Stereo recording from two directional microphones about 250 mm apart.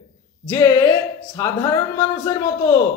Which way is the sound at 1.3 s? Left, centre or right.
Centre.